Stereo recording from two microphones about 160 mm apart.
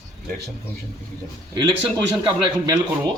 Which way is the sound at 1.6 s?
25° right (ahead or behind).